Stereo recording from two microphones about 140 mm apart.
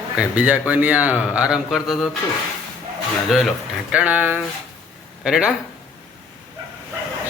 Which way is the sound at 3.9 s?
10° right (ahead or behind).